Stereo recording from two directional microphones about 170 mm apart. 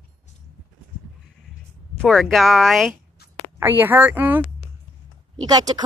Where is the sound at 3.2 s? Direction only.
65° left (ahead or behind).